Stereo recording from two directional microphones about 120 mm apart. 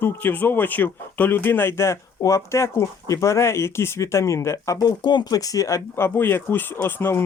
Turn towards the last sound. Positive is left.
turn(degrees=20)  # may be behind; listen again after turning